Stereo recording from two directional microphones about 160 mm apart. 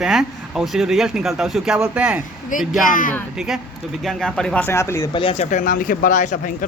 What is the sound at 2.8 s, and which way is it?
Speech, 55° left (ahead or behind).